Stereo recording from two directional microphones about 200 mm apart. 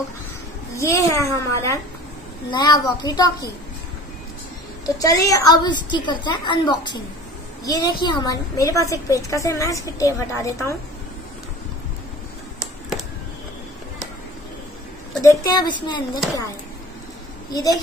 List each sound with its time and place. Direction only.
0.7 s a woman's voice: 15° left (ahead or behind)
4.8 s a woman's voice: 15° left (ahead or behind)
15.2 s a woman's voice: 20° left (ahead or behind)
17.5 s a woman's voice: 20° left (ahead or behind)